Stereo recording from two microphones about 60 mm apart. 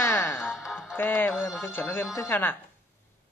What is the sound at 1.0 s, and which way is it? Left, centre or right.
Speech, left.